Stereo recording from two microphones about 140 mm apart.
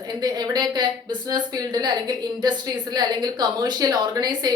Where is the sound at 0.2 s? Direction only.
30° right (ahead or behind).